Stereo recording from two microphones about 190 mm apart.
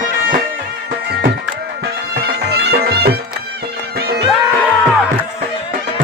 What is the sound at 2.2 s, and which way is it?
Music, 55° right (ahead or behind).